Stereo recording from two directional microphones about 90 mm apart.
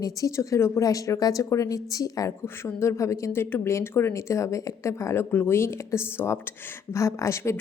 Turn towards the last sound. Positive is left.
turn(degrees=35)  # may be behind; listen again after turning